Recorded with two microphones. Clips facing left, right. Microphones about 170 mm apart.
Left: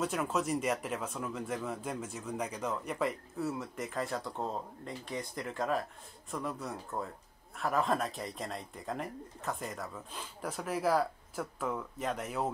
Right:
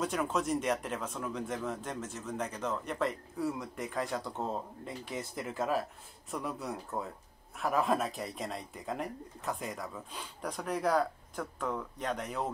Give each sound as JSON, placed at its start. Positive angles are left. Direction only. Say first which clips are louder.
{"t": 0.0, "sound": "speech", "louder": "even", "side_deg": 5}